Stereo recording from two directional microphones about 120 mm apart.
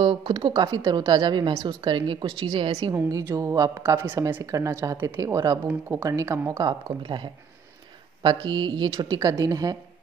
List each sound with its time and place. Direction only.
0.0 s a woman's voice: 45° right (ahead or behind)
0.5 s a woman's voice: 35° right (ahead or behind); by 2.9 s 50° right (ahead or behind)
2.9 s a woman's voice: 25° right (ahead or behind)
4.0 s a woman's voice: 20° right (ahead or behind)
6.7 s speech: 40° right (ahead or behind)